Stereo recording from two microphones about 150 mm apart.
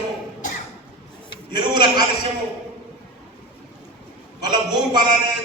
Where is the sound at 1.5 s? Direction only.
30° right (ahead or behind).